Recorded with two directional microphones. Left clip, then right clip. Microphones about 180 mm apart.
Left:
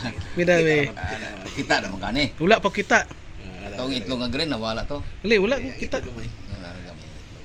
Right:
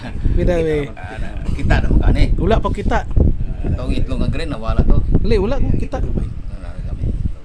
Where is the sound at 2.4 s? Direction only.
20° right (ahead or behind).